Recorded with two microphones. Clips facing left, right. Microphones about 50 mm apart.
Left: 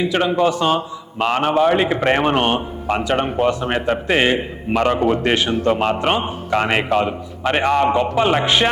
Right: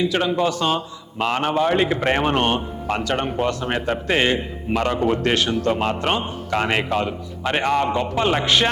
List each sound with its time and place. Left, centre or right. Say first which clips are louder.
0.0 s a man's voice: left 3 dB; centre